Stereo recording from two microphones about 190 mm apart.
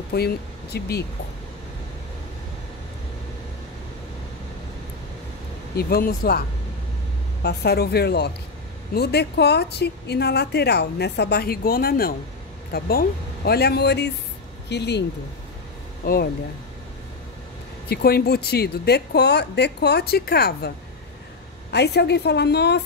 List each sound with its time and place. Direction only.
0.1 s speech: 60° left (ahead or behind)
5.8 s speech: 55° left (ahead or behind)
7.4 s speech: 55° left (ahead or behind)
17.8 s speech: 55° left (ahead or behind)